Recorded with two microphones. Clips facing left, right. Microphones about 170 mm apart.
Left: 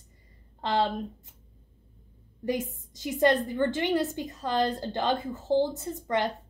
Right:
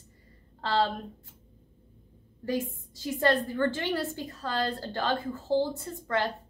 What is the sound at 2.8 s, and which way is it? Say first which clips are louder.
A woman's voice: left 4 dB; 20° left (ahead or behind).